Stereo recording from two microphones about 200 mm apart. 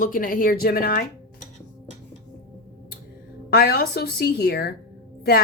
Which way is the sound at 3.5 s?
50° left (ahead or behind).